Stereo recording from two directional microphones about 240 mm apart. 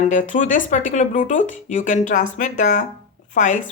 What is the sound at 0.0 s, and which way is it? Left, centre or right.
A woman's voice, left.